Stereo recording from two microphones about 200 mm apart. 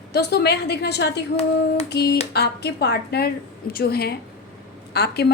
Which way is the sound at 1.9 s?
55° left (ahead or behind).